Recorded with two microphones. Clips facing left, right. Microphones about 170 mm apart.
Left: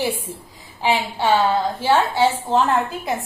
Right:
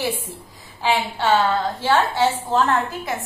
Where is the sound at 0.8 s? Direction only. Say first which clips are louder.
Left 1 dB; 15° left (ahead or behind).